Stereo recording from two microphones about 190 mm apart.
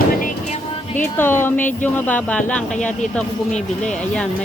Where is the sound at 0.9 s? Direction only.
10° left (ahead or behind).